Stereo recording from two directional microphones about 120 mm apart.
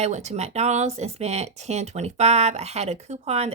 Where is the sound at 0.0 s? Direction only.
70° right (ahead or behind).